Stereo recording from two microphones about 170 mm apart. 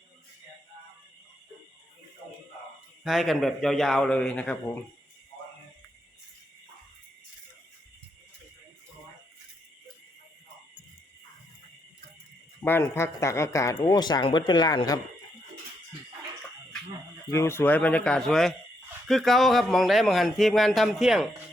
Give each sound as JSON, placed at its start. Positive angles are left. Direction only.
{"t": 3.0, "sound": "speech", "side_deg": 0}
{"t": 12.6, "sound": "speech", "side_deg": 15}
{"t": 17.3, "sound": "speech", "side_deg": 15}